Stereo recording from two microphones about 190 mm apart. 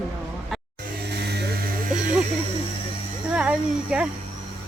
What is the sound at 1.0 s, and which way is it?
Vehicle, 60° right (ahead or behind).